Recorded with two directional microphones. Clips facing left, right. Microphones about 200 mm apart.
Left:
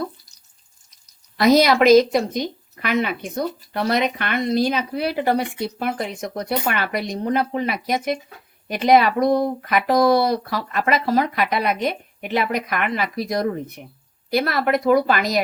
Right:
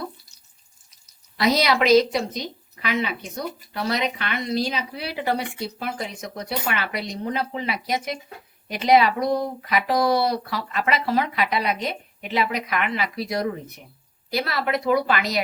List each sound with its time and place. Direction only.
1.4 s speech: 50° left (ahead or behind)